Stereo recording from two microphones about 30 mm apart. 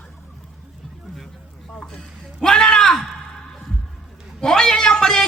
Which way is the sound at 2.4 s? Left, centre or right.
Left.